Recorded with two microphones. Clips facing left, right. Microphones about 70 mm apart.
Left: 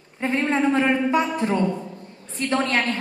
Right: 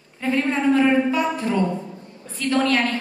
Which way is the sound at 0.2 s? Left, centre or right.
Left.